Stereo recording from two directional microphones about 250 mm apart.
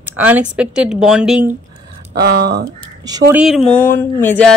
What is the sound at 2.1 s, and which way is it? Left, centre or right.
Speech, right.